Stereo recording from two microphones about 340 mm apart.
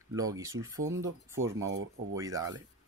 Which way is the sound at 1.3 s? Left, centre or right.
Right.